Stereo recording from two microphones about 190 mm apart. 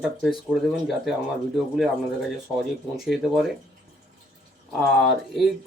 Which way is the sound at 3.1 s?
Centre (ahead or behind).